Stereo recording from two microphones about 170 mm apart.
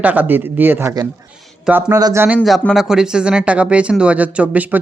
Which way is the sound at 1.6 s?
5° right (ahead or behind).